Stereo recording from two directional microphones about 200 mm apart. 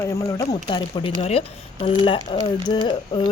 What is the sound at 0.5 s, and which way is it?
Speech, 30° left (ahead or behind).